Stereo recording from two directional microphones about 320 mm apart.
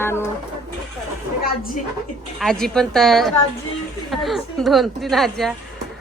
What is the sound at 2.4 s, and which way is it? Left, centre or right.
A woman's voice, centre.